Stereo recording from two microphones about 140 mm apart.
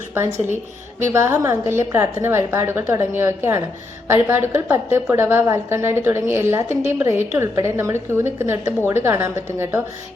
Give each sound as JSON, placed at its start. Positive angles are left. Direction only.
{"t": 0.1, "sound": "a woman's voice", "side_deg": -20}